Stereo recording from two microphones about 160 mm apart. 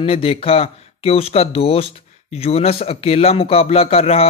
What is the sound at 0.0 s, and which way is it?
Speech, 35° left (ahead or behind).